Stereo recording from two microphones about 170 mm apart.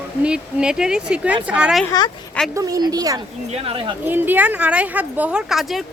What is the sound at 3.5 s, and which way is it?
Speech, 35° right (ahead or behind).